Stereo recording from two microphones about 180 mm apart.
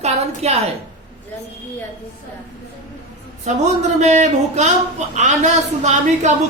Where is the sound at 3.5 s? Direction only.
45° right (ahead or behind).